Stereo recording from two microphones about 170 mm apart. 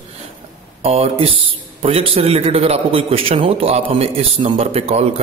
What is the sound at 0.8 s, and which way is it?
A man's voice, 35° right (ahead or behind).